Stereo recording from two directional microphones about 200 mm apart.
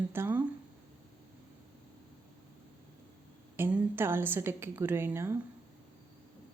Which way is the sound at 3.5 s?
10° right (ahead or behind).